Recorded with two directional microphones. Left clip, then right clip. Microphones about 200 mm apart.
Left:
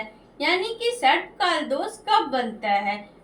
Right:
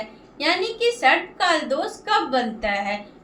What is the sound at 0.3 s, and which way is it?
A woman's voice, 20° right (ahead or behind).